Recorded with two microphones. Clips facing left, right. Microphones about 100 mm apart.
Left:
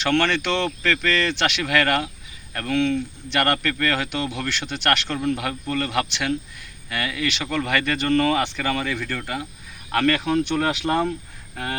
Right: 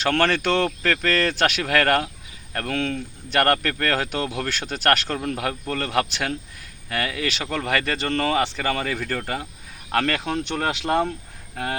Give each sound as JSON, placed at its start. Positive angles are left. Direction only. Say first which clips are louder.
{"t": 0.0, "sound": "speech", "louder": "even", "side_deg": -40}